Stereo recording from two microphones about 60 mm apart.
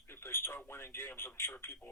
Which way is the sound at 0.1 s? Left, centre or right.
Left.